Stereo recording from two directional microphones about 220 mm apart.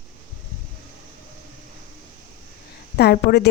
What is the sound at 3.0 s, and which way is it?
Speech, 45° left (ahead or behind).